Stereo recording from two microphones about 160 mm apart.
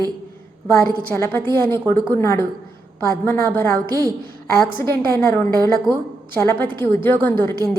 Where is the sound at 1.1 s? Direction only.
15° left (ahead or behind).